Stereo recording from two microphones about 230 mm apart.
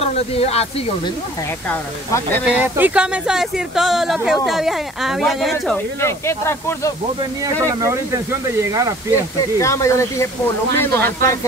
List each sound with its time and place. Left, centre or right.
0.0 s speech: left
1.7 s speech: centre
2.4 s speech: centre
5.9 s speech: centre
7.8 s speech: centre
9.6 s speech: centre